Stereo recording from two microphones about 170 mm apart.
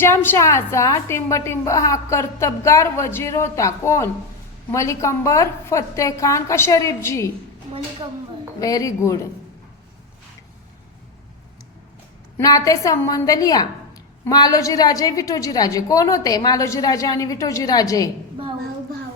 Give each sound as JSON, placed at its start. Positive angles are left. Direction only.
{"t": 0.0, "sound": "a woman's voice", "side_deg": 15}
{"t": 8.5, "sound": "a woman's voice", "side_deg": 20}
{"t": 12.4, "sound": "a woman's voice", "side_deg": 20}